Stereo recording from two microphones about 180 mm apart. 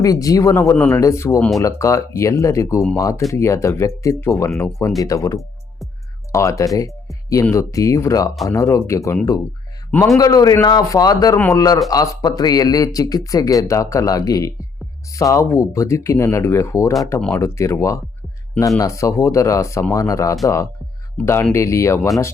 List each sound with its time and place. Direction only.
0.0 s speech: 20° left (ahead or behind)
6.7 s music: 20° left (ahead or behind)
7.4 s speech: 15° left (ahead or behind)
10.2 s speech: 20° left (ahead or behind)